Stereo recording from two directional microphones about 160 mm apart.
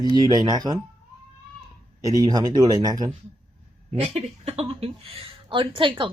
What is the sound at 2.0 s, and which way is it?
Speech, 20° right (ahead or behind).